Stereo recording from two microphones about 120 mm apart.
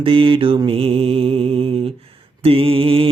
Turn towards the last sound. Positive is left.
turn(degrees=-50)  # may be behind; listen again after turning